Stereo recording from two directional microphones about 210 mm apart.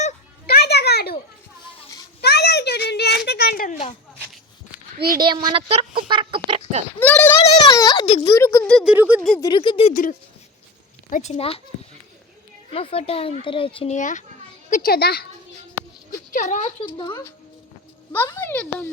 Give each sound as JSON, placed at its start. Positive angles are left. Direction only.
{"t": 0.4, "sound": "a sound", "side_deg": 50}
{"t": 2.2, "sound": "a sound", "side_deg": 50}
{"t": 5.1, "sound": "speech", "side_deg": -20}
{"t": 6.0, "sound": "duck", "side_deg": -25}
{"t": 7.0, "sound": "speech", "side_deg": 5}
{"t": 7.5, "sound": "a sound", "side_deg": 20}
{"t": 8.0, "sound": "a child's voice", "side_deg": 30}
{"t": 8.3, "sound": "speech", "side_deg": 15}
{"t": 9.4, "sound": "a child's voice", "side_deg": 20}
{"t": 9.9, "sound": "a child's voice", "side_deg": 40}
{"t": 12.7, "sound": "a child's voice", "side_deg": 25}
{"t": 16.3, "sound": "speech", "side_deg": 35}
{"t": 17.0, "sound": "a child's voice", "side_deg": 20}